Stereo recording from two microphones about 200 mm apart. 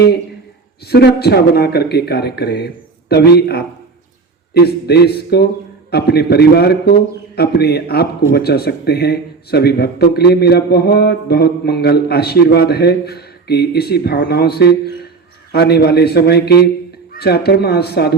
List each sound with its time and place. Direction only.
0.9 s a man's voice: 55° left (ahead or behind)